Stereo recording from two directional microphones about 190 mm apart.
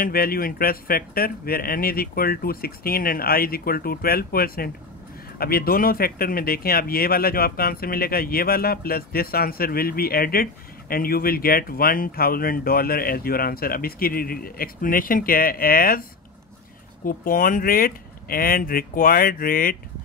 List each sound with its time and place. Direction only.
0.0 s speech: 50° left (ahead or behind)